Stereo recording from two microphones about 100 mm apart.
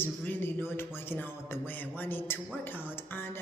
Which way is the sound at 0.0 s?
20° left (ahead or behind).